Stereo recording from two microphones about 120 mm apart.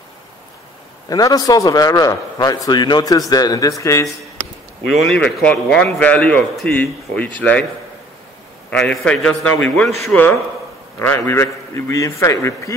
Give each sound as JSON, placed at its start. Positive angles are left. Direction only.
{"t": 1.0, "sound": "a man's voice", "side_deg": 30}
{"t": 4.8, "sound": "a man's voice", "side_deg": 0}
{"t": 8.6, "sound": "a man's voice", "side_deg": 10}
{"t": 10.0, "sound": "a man's voice", "side_deg": 15}